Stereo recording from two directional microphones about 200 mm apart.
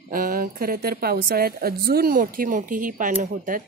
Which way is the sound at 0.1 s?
45° right (ahead or behind).